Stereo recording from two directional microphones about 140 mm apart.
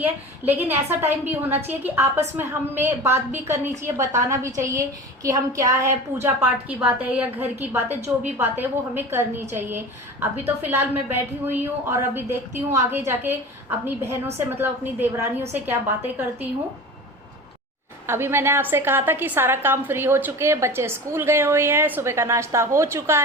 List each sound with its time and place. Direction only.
0.0 s a woman's voice: 15° right (ahead or behind)
18.0 s a woman's voice: 15° right (ahead or behind)